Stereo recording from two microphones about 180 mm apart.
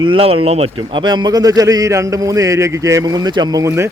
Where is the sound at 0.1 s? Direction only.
30° right (ahead or behind).